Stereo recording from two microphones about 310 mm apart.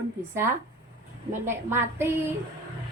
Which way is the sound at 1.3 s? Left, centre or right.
Centre.